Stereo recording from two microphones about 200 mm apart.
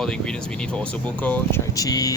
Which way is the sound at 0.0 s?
5° left (ahead or behind).